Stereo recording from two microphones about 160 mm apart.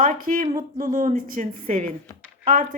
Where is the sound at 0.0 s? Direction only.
55° right (ahead or behind).